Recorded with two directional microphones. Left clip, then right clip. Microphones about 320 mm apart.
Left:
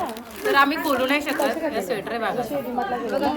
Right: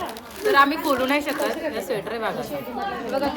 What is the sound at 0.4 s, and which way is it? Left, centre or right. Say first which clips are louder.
A woman's voice: right 1 dB; centre.